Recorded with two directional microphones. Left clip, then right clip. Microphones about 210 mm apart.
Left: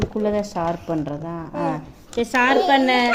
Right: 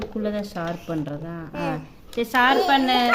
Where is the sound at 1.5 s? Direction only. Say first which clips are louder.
Left 3 dB; 55° right (ahead or behind).